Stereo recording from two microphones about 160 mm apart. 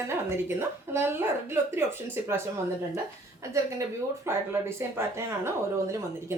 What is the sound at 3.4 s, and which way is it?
A woman's voice, 20° right (ahead or behind).